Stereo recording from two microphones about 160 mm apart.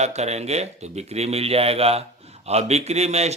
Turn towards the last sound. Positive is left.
turn(degrees=-45)  # may be behind; listen again after turning